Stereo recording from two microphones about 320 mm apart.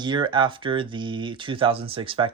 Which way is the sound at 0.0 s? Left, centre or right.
Centre.